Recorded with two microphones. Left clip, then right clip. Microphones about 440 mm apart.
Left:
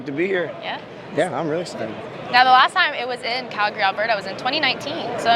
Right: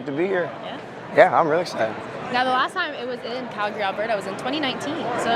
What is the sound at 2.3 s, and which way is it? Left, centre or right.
Speech, left.